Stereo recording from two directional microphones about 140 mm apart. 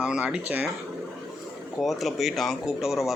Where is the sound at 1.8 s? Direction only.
Centre (ahead or behind).